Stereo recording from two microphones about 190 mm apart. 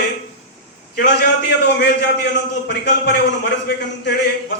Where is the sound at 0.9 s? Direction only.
65° left (ahead or behind).